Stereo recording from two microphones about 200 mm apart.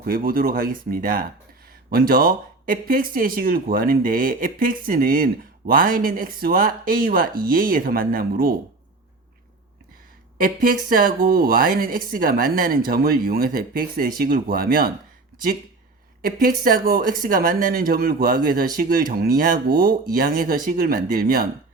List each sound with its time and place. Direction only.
0.0 s speech: 45° right (ahead or behind)
10.3 s speech: 45° right (ahead or behind)
16.2 s speech: 45° right (ahead or behind)